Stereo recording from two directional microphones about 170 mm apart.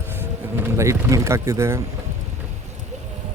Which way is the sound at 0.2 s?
15° right (ahead or behind).